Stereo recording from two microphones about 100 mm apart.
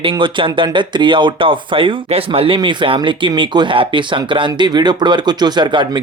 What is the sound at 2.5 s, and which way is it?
Speech, 55° right (ahead or behind).